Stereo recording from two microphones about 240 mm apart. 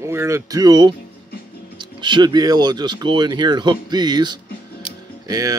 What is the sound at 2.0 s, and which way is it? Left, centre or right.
Speech, centre.